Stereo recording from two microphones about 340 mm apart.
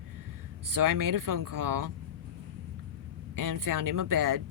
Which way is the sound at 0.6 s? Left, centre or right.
Right.